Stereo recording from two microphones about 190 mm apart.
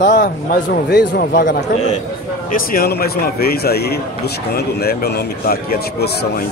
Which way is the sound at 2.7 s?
55° left (ahead or behind).